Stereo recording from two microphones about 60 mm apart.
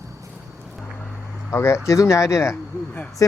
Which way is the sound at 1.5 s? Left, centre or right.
Left.